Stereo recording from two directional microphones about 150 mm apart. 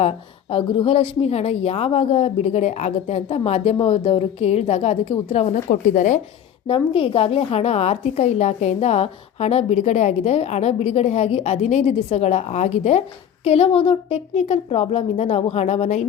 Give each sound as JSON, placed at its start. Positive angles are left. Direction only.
{"t": 0.0, "sound": "a woman's voice", "side_deg": 40}
{"t": 6.7, "sound": "a woman's voice", "side_deg": 35}